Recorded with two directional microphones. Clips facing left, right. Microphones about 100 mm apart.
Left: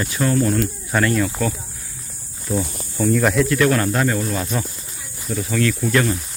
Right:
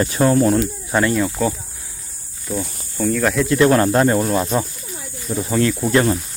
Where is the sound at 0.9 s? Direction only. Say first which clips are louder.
Right 2 dB; 15° right (ahead or behind).